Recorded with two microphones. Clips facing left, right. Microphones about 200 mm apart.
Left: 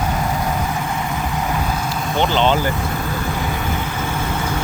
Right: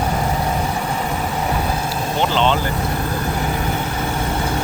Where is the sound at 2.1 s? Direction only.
Centre (ahead or behind).